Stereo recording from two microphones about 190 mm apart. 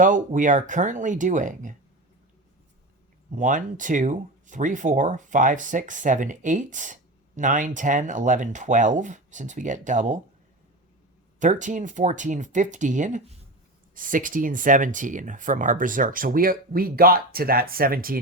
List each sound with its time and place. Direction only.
0.0 s speech: 45° right (ahead or behind)
3.3 s speech: 45° right (ahead or behind)
11.3 s speech: 40° right (ahead or behind)